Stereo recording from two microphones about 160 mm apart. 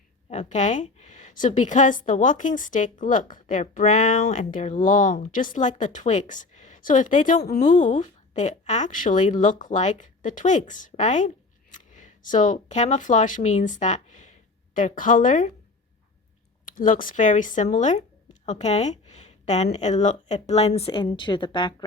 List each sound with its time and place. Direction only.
0.3 s a woman's voice: 45° left (ahead or behind)
16.6 s a woman's voice: 55° left (ahead or behind); by 21.8 s 30° left (ahead or behind)